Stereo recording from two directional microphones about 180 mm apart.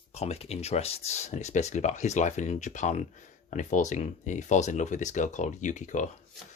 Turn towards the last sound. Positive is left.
turn(degrees=45)  # may be behind; listen again after turning